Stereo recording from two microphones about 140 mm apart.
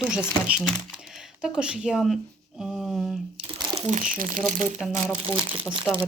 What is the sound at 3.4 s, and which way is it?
Crumpling, 40° right (ahead or behind).